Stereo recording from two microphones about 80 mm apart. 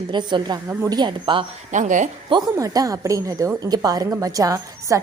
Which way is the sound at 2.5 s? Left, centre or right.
Right.